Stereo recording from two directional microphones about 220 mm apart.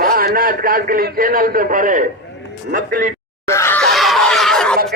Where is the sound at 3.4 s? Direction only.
10° left (ahead or behind).